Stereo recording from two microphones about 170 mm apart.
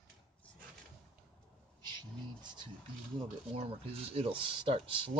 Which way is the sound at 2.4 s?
25° right (ahead or behind).